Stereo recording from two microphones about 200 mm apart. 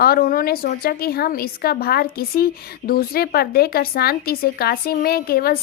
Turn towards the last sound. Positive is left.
turn(degrees=50)  # may be behind; listen again after turning